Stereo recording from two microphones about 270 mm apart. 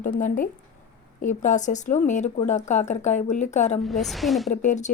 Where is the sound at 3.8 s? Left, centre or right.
Centre.